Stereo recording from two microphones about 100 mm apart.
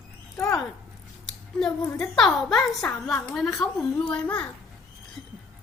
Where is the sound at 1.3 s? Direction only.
5° left (ahead or behind).